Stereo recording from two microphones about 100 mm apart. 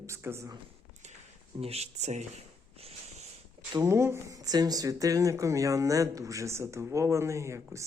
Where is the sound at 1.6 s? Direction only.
90° right.